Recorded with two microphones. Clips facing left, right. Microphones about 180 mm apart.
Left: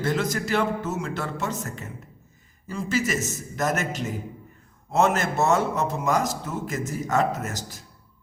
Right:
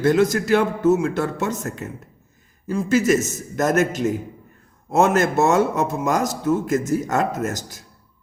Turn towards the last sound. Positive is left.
turn(degrees=-45)  # may be behind; listen again after turning